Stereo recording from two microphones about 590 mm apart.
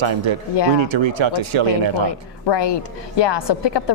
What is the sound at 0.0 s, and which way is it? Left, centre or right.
Speech, right.